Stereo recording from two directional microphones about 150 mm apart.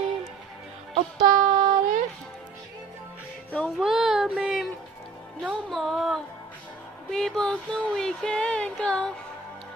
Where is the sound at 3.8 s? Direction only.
5° right (ahead or behind).